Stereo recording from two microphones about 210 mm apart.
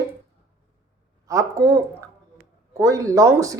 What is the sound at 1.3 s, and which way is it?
Speech, 15° right (ahead or behind).